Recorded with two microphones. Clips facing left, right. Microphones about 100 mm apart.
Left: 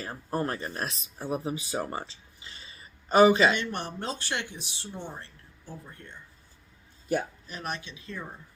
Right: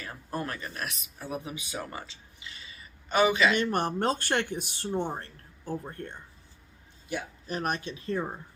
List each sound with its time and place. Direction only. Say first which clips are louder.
0.0 s speech: left 4 dB; 30° left (ahead or behind)
3.5 s speech: right 5 dB; 45° right (ahead or behind)
7.1 s speech: left 6 dB; 45° left (ahead or behind)
7.4 s speech: right 5 dB; 45° right (ahead or behind)